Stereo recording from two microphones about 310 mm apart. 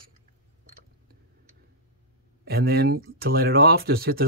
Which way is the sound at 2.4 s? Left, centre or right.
Right.